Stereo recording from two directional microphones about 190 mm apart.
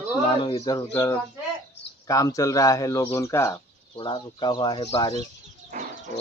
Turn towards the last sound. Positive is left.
turn(degrees=-45)  # may be behind; listen again after turning